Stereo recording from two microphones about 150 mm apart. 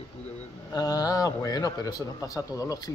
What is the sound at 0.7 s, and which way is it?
A man's voice, 25° left (ahead or behind).